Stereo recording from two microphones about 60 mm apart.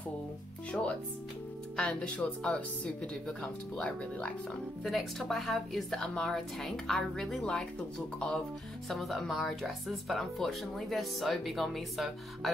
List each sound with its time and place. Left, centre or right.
0.7 s speech: centre
4.8 s speech: centre
8.8 s speech: centre